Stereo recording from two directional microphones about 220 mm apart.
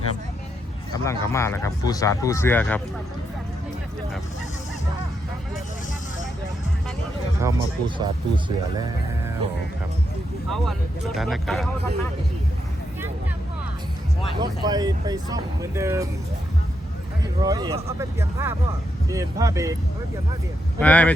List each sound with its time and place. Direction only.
1.0 s speech: 10° left (ahead or behind)
7.4 s speech: 20° right (ahead or behind)
10.5 s speech: centre (ahead or behind)
14.3 s speech: 20° right (ahead or behind)
17.4 s speech: 15° right (ahead or behind)
20.7 s speech: 5° left (ahead or behind)